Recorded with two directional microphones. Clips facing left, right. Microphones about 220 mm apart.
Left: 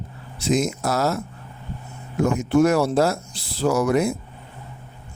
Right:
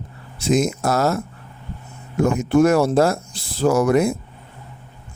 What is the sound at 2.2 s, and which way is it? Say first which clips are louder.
Speech: right 2 dB; 50° right (ahead or behind).